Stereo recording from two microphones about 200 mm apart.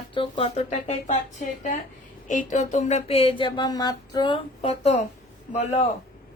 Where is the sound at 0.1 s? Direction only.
25° left (ahead or behind).